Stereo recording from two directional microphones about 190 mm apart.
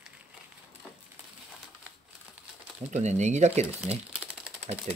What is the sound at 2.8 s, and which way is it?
Speech, 35° right (ahead or behind).